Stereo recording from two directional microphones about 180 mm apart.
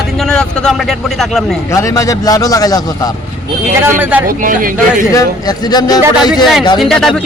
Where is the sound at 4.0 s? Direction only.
10° right (ahead or behind).